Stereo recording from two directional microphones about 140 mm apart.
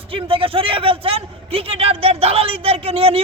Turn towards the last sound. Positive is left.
turn(degrees=-40)  # may be behind; listen again after turning